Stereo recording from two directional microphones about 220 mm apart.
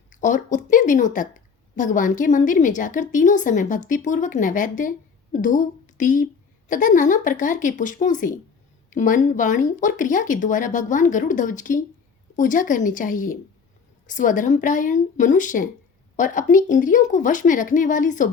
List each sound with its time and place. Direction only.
0.1 s a woman's voice: 35° left (ahead or behind)